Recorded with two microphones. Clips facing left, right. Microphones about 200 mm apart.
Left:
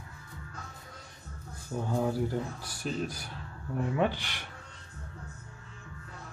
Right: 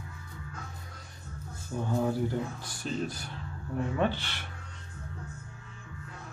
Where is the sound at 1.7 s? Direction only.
15° left (ahead or behind).